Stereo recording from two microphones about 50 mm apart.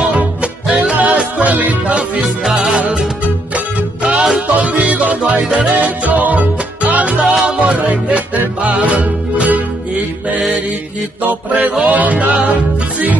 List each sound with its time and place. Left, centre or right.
0.7 s music: centre
0.9 s music: right
2.2 s music: centre
2.8 s music: centre
7.2 s music: centre
11.9 s music: right
12.3 s music: centre